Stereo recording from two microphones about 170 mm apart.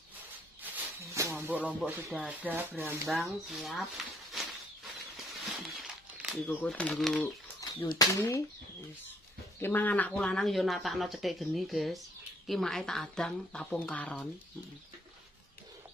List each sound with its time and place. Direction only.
0.6 s music: 10° right (ahead or behind)
1.4 s speech: 10° right (ahead or behind)
3.1 s speech: centre (ahead or behind)
5.1 s a sound: centre (ahead or behind)
6.4 s speech: 10° left (ahead or behind)
8.0 s speech: 20° left (ahead or behind)
9.6 s speech: 10° left (ahead or behind)